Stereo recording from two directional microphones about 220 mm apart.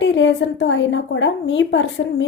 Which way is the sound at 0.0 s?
55° left (ahead or behind).